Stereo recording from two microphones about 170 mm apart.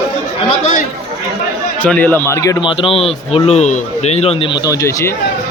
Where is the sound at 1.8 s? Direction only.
10° left (ahead or behind).